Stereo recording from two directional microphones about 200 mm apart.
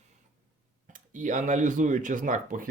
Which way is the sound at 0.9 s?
40° right (ahead or behind).